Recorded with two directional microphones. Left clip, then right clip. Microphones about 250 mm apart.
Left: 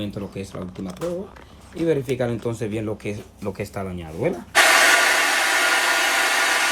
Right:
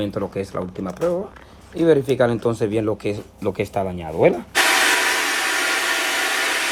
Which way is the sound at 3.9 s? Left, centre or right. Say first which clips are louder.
Right 9 dB; centre.